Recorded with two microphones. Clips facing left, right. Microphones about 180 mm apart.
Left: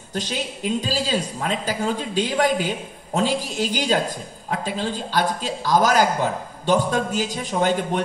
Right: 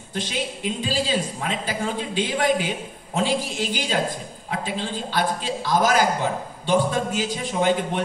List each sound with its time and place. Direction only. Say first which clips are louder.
0.7 s a man's voice: even; 40° left (ahead or behind)